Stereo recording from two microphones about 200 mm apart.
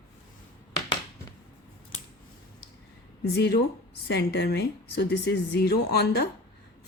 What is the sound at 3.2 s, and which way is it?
Speech, 55° left (ahead or behind).